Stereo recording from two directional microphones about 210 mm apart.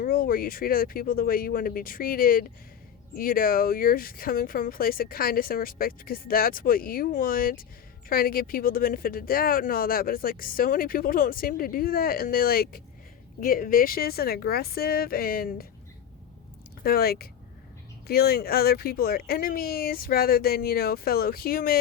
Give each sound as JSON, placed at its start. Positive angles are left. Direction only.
{"t": 0.0, "sound": "speech", "side_deg": 45}
{"t": 16.8, "sound": "speech", "side_deg": 45}